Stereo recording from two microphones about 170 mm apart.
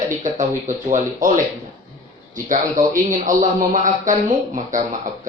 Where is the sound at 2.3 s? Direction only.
50° right (ahead or behind).